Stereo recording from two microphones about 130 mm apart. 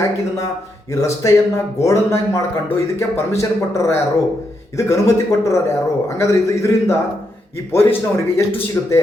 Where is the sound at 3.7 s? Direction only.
20° left (ahead or behind).